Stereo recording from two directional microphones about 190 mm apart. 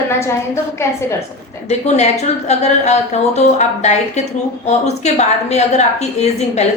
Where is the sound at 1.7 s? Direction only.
35° left (ahead or behind).